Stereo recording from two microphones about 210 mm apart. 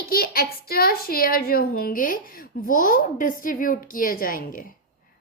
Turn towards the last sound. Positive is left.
turn(degrees=40)  # may be behind; listen again after turning